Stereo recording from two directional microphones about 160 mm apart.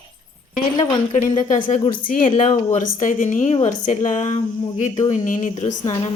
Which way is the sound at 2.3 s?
45° left (ahead or behind).